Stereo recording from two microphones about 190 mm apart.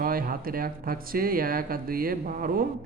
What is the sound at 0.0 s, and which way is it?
Speech, 50° right (ahead or behind).